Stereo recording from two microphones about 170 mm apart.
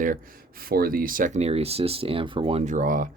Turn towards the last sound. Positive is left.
turn(degrees=-55)  # may be behind; listen again after turning